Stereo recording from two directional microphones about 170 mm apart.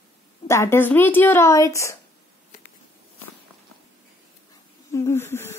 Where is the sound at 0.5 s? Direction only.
15° left (ahead or behind).